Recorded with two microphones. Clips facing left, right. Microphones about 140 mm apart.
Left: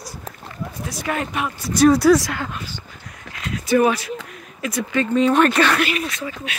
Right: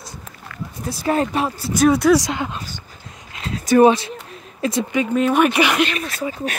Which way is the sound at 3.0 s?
30° right (ahead or behind).